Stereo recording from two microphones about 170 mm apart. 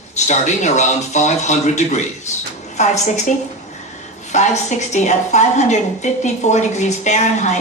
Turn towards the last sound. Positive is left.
turn(degrees=45)  # may be behind; listen again after turning